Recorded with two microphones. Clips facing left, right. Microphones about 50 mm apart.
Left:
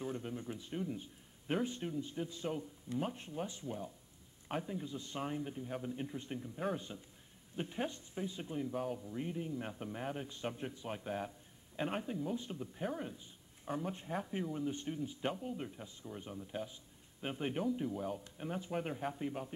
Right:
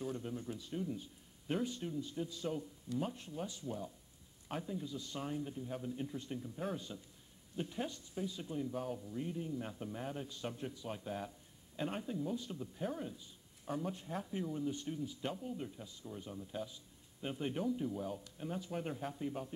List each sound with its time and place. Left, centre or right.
0.0 s a sound: left
1.5 s a man's voice: left
18.2 s a man's voice: left